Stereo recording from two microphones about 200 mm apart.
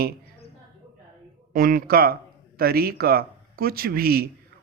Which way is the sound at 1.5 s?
45° right (ahead or behind).